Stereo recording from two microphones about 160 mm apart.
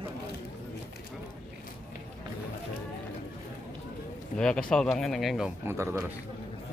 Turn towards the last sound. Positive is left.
turn(degrees=-15)  # may be behind; listen again after turning